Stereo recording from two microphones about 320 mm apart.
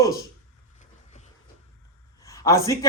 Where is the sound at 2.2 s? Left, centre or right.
Centre.